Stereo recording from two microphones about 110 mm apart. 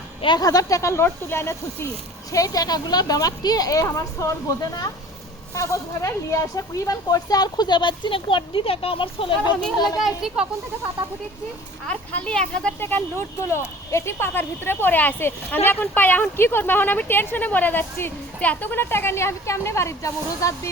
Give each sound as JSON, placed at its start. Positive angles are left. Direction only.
{"t": 0.3, "sound": "a woman's voice", "side_deg": 35}
{"t": 10.0, "sound": "a child's voice", "side_deg": -5}
{"t": 11.9, "sound": "speech", "side_deg": 10}
{"t": 12.8, "sound": "speech", "side_deg": 20}